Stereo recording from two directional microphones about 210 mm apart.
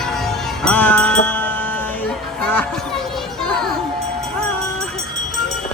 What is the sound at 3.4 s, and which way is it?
Children playing, centre (ahead or behind).